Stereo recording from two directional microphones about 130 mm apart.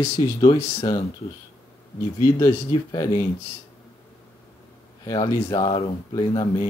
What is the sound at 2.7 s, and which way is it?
Speech, 30° left (ahead or behind).